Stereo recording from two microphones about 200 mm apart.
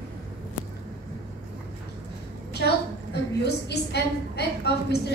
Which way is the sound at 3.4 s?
55° left (ahead or behind).